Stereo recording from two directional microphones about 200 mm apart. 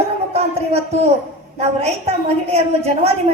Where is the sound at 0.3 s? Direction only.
30° right (ahead or behind).